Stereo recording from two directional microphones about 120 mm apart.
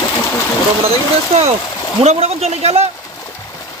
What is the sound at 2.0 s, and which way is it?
Speech, 60° right (ahead or behind).